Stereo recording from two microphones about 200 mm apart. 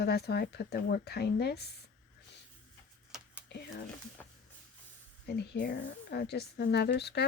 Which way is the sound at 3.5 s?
55° left (ahead or behind).